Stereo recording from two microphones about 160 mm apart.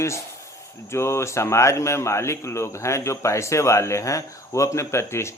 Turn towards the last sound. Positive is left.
turn(degrees=15)  # may be behind; listen again after turning